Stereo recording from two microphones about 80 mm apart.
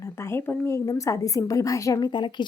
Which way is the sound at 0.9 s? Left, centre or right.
Left.